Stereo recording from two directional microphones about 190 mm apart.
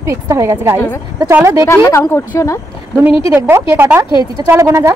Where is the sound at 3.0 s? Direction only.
10° right (ahead or behind).